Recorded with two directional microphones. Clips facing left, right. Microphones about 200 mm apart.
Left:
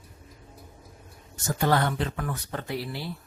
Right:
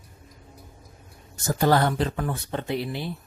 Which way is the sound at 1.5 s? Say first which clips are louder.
Right 4 dB; 35° right (ahead or behind).